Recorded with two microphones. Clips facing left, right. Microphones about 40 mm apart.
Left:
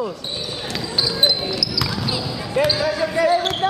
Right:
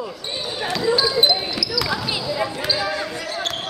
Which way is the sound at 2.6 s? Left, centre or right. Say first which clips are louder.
Left 4 dB; centre.